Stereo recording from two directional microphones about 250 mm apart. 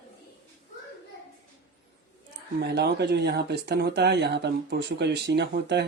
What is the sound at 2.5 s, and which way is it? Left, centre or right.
Speech, right.